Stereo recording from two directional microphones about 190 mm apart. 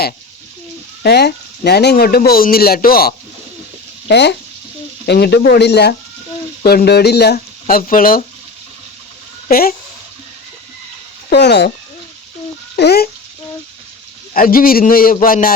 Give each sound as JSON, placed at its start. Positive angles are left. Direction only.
{"t": 1.0, "sound": "speech", "side_deg": 60}
{"t": 4.1, "sound": "speech", "side_deg": 65}
{"t": 9.5, "sound": "speech", "side_deg": 50}
{"t": 11.3, "sound": "speech", "side_deg": 60}
{"t": 12.7, "sound": "speech", "side_deg": 60}
{"t": 14.3, "sound": "speech", "side_deg": 50}